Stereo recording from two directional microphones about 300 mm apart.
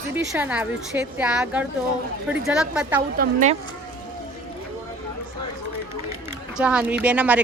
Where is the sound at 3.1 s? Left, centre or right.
Right.